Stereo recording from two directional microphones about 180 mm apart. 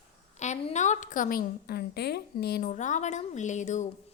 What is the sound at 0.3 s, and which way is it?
Speech, 40° left (ahead or behind).